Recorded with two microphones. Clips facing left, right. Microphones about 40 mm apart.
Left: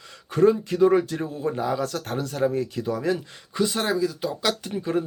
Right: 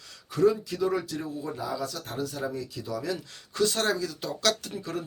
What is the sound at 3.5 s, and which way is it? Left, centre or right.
Speech, centre.